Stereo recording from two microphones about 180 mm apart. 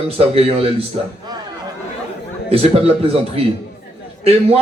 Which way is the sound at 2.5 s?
35° right (ahead or behind).